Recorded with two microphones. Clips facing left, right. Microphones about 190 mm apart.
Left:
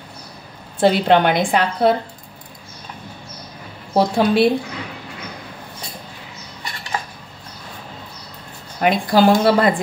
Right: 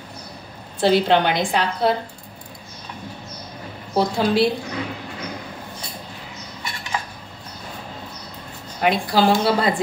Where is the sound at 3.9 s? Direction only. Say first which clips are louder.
Left 3 dB; 60° left (ahead or behind).